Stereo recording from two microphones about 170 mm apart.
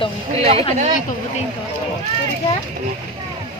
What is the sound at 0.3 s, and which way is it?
Speech, 35° right (ahead or behind).